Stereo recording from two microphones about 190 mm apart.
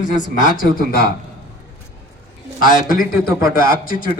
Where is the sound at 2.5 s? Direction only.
45° left (ahead or behind).